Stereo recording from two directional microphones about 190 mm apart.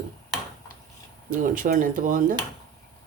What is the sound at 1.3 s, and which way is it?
Speech, 45° right (ahead or behind).